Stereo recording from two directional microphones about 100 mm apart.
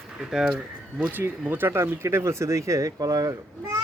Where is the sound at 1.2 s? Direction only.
20° right (ahead or behind).